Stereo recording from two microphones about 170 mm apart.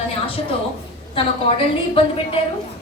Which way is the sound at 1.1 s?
30° left (ahead or behind).